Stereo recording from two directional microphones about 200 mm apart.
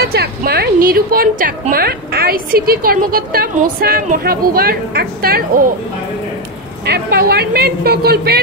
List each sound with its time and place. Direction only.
0.0 s a woman's voice: 50° right (ahead or behind)
6.9 s a woman's voice: 50° right (ahead or behind)